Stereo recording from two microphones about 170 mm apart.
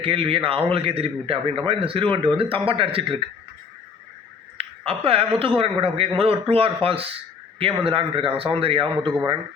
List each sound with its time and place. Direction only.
0.0 s a man's voice: 35° right (ahead or behind)
4.9 s a man's voice: 35° right (ahead or behind)